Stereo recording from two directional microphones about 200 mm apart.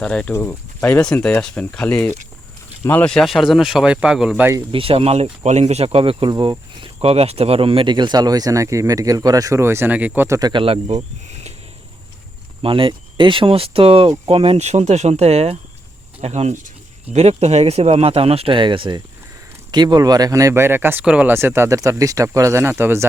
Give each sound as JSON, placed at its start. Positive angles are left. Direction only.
{"t": 0.0, "sound": "speech", "side_deg": 5}
{"t": 4.5, "sound": "speech", "side_deg": -25}
{"t": 12.6, "sound": "speech", "side_deg": -25}